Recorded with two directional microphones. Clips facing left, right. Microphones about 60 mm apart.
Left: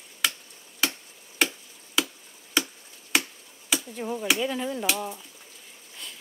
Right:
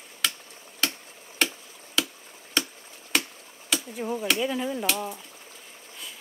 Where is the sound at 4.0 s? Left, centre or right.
Centre.